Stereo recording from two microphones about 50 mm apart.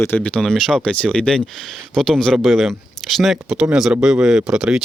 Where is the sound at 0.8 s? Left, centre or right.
Centre.